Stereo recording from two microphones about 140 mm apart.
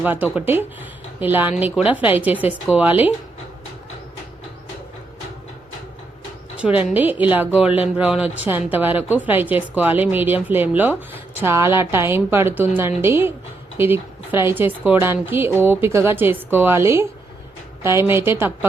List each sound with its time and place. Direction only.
0.0 s a woman's voice: 15° right (ahead or behind)
6.6 s a woman's voice: 10° right (ahead or behind)